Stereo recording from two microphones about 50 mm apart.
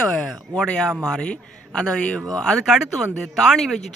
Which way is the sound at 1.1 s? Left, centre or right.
Centre.